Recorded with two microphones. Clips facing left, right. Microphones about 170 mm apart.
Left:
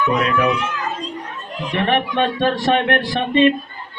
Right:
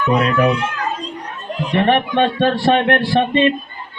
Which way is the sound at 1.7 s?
35° right (ahead or behind).